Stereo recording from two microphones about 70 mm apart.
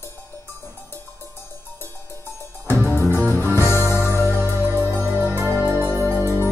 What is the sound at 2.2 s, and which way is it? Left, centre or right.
Music, left.